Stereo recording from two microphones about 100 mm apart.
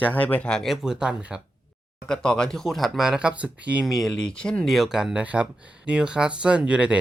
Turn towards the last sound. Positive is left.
turn(degrees=-10)  # may be behind; listen again after turning